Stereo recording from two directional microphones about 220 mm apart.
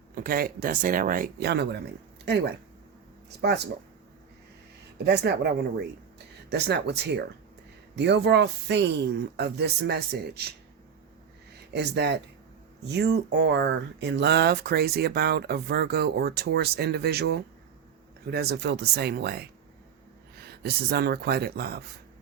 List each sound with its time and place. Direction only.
0.1 s speech: 40° right (ahead or behind)
5.0 s speech: 50° right (ahead or behind)
11.7 s speech: 50° right (ahead or behind)